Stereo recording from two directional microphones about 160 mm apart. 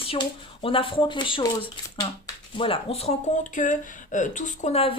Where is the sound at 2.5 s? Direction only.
35° left (ahead or behind).